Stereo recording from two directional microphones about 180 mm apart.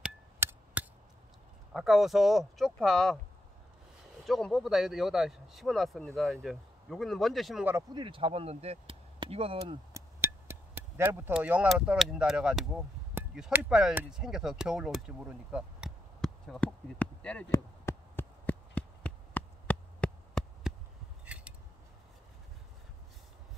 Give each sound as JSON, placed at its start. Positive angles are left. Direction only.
{"t": 0.0, "sound": "chop", "side_deg": -10}
{"t": 1.7, "sound": "speech", "side_deg": 0}
{"t": 4.3, "sound": "speech", "side_deg": 0}
{"t": 7.9, "sound": "speech", "side_deg": -25}
{"t": 9.6, "sound": "speech", "side_deg": -20}
{"t": 13.7, "sound": "a sound", "side_deg": -5}
{"t": 21.3, "sound": "scissors", "side_deg": -5}